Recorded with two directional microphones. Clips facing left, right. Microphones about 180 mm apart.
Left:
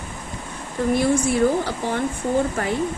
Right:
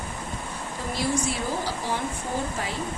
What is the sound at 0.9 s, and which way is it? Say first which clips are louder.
Speech: left 7 dB; 55° left (ahead or behind).